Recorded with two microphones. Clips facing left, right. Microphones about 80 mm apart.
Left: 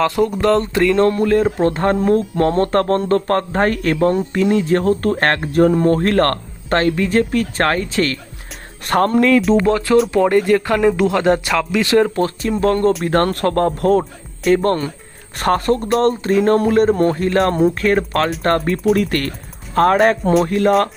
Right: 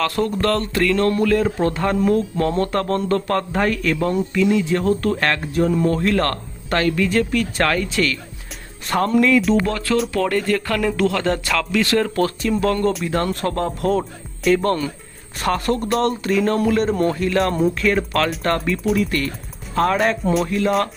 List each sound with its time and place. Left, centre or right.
0.0 s speech: centre; by 8.2 s left
8.9 s speech: left
9.1 s speech: left
9.6 s speech: left
12.4 s speech: left
13.0 s speech: left
18.9 s speech: left